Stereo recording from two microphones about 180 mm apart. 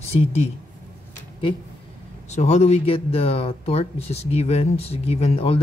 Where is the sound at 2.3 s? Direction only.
35° left (ahead or behind).